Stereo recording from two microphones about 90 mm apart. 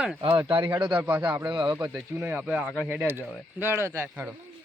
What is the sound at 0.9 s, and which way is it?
Speech, 15° right (ahead or behind).